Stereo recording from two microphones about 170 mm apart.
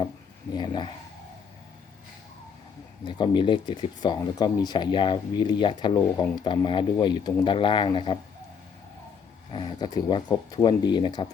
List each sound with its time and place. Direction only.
0.5 s speech: 25° left (ahead or behind)
3.0 s speech: 30° left (ahead or behind)
9.5 s speech: 30° left (ahead or behind)